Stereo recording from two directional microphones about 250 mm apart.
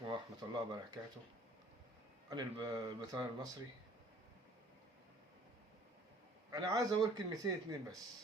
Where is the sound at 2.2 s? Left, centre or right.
Centre.